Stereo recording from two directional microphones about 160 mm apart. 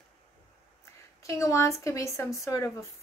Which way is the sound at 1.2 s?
20° left (ahead or behind).